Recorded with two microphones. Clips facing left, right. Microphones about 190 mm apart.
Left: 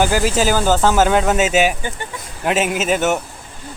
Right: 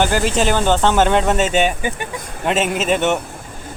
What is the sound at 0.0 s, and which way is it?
A man's voice, 5° left (ahead or behind).